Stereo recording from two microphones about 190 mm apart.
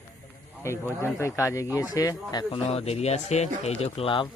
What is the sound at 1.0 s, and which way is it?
A man's voice, 15° left (ahead or behind).